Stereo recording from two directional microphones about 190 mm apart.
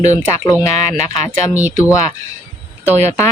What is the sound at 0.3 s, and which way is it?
Speech, 15° left (ahead or behind).